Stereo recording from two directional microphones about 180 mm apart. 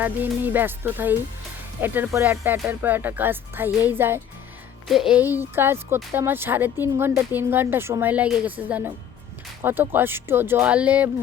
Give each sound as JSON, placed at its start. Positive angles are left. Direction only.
{"t": 0.0, "sound": "speech", "side_deg": -10}